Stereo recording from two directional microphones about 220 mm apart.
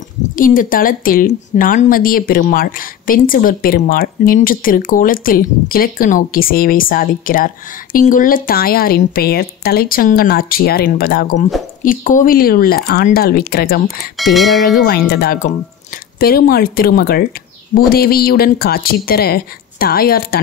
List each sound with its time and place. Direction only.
0.4 s a woman's voice: 40° left (ahead or behind)
13.8 s speech: centre (ahead or behind)
14.8 s a woman's voice: 45° left (ahead or behind)